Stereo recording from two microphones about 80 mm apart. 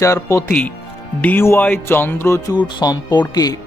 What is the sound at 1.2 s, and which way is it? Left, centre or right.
Music, left.